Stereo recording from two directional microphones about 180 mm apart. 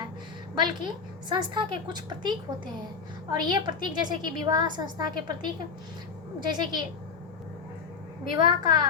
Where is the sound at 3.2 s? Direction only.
25° right (ahead or behind).